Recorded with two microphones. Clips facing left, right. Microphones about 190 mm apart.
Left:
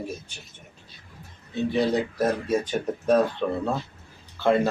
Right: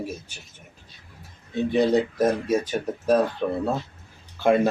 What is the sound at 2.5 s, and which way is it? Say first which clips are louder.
Speech: right 1 dB; 5° right (ahead or behind).